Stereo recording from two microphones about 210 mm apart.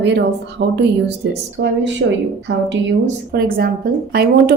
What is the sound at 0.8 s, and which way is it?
A woman's voice, 50° right (ahead or behind).